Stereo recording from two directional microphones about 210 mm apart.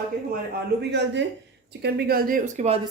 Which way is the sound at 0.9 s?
55° right (ahead or behind).